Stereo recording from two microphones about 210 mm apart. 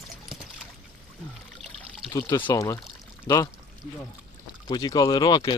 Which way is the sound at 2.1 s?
20° left (ahead or behind).